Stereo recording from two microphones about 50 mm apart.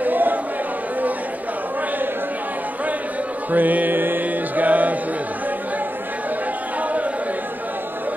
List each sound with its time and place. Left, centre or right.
0.0 s a sound: right
3.5 s music: right
6.8 s chatter: right